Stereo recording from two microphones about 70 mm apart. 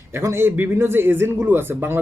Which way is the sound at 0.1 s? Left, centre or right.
Right.